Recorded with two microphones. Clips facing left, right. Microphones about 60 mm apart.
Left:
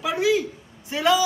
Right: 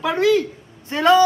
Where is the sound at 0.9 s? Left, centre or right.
Right.